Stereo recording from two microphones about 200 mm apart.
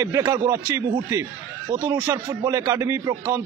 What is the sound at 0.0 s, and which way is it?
Speech, 10° right (ahead or behind).